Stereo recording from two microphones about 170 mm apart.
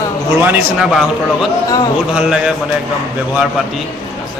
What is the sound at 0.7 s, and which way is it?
Speech, centre (ahead or behind).